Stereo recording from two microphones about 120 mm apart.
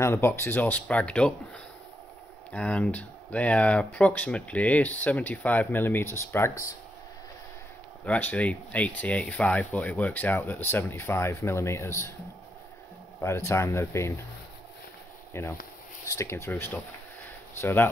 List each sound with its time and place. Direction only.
0.0 s speech: 20° left (ahead or behind)
2.5 s speech: 10° left (ahead or behind)
8.0 s speech: 10° left (ahead or behind)
13.2 s speech: 20° left (ahead or behind)
15.3 s speech: 20° left (ahead or behind)